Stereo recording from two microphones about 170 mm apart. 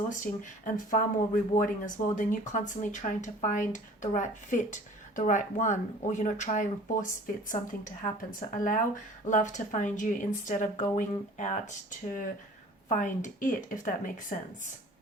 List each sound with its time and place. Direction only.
0.1 s speech: 50° left (ahead or behind)